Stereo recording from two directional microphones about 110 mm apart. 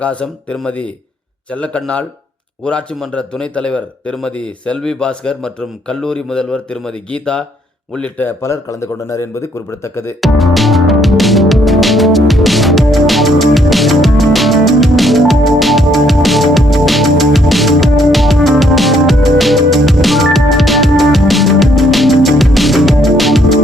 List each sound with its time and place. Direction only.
0.0 s a man's voice: 10° left (ahead or behind)
10.2 s music: centre (ahead or behind)